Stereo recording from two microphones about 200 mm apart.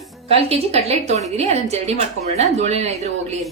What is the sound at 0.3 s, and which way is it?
A woman's voice, 30° right (ahead or behind).